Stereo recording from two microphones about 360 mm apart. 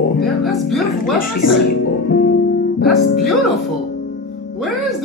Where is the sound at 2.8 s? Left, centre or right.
Centre.